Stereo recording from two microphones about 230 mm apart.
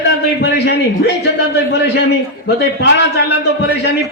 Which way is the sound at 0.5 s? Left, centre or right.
Left.